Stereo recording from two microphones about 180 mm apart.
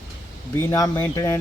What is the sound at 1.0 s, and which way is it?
Speech, 15° left (ahead or behind).